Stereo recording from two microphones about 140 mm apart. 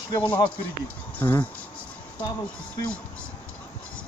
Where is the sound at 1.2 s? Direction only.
15° left (ahead or behind).